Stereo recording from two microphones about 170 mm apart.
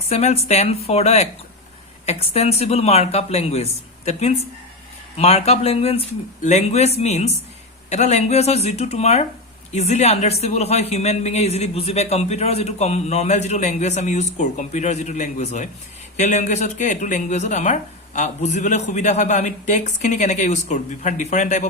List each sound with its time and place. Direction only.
0.1 s speech: 40° left (ahead or behind)